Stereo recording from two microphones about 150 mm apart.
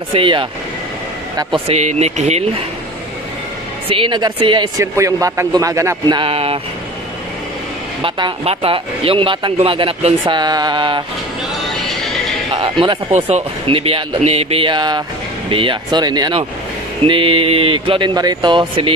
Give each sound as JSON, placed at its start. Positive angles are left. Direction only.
{"t": 0.1, "sound": "speech", "side_deg": -35}
{"t": 1.7, "sound": "speech", "side_deg": -45}
{"t": 3.9, "sound": "speech", "side_deg": -35}
{"t": 4.9, "sound": "a man's voice", "side_deg": -20}
{"t": 6.1, "sound": "speech", "side_deg": -40}
{"t": 8.0, "sound": "speech", "side_deg": -35}
{"t": 11.6, "sound": "music", "side_deg": 0}
{"t": 12.5, "sound": "speech", "side_deg": -35}